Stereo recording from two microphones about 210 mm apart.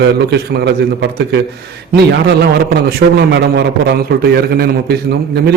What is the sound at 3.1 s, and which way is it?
A man's voice, 55° right (ahead or behind).